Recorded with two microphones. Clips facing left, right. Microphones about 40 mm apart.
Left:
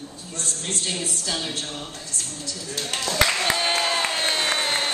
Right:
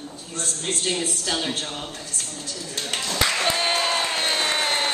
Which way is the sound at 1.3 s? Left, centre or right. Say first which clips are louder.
Right 3 dB; right.